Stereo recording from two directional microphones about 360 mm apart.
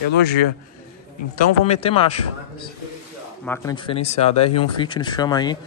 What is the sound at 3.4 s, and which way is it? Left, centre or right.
Speech, centre.